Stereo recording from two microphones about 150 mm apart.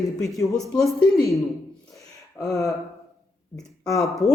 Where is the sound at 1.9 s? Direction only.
20° left (ahead or behind).